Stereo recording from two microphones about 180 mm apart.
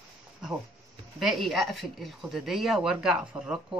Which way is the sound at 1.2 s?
Centre (ahead or behind).